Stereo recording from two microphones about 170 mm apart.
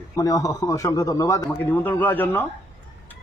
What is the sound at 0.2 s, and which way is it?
A man's voice, 20° left (ahead or behind).